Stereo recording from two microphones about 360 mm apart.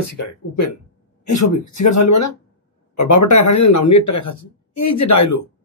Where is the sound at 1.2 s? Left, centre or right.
Left.